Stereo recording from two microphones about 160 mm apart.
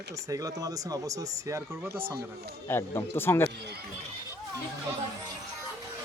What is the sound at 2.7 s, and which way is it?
Speech, 15° left (ahead or behind).